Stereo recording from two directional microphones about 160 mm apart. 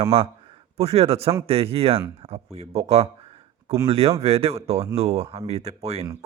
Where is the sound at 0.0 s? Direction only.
40° right (ahead or behind).